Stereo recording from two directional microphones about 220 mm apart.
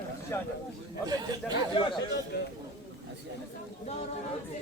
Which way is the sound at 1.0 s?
20° right (ahead or behind).